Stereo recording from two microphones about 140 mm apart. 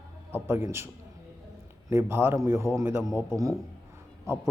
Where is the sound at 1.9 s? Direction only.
15° right (ahead or behind).